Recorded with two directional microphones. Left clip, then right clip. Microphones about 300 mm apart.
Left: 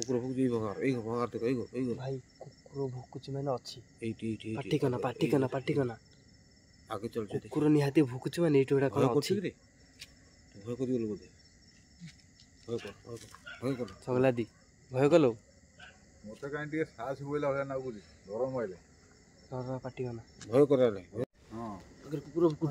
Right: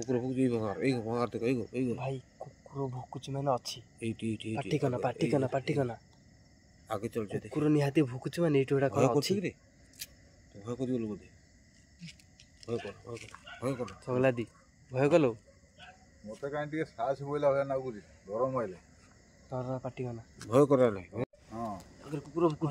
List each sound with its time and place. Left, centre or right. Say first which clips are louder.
0.1 s speech: right 1 dB; centre
2.0 s speech: right 1 dB; centre
4.0 s speech: even; right
4.5 s speech: left 1 dB; centre
6.9 s speech: right 1 dB; centre
7.4 s speech: left 2 dB; centre
10.6 s speech: left 1 dB; centre
12.7 s speech: right 2 dB; centre
16.3 s speech: right 2 dB; centre
18.3 s speech: right 2 dB; right
19.5 s speech: right 2 dB; centre
20.3 s speech: right 1 dB; right
22.1 s speech: left 1 dB; centre